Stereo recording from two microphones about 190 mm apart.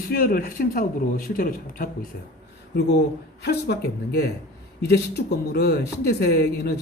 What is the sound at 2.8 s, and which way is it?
Speech, 60° left (ahead or behind).